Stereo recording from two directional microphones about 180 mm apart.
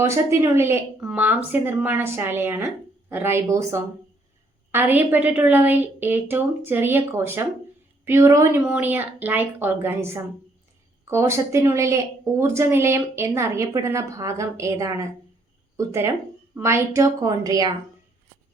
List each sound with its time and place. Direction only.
0.1 s a woman's voice: 15° right (ahead or behind)